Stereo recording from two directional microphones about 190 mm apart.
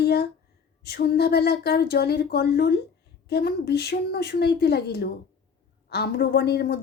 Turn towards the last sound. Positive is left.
turn(degrees=60)  # may be behind; listen again after turning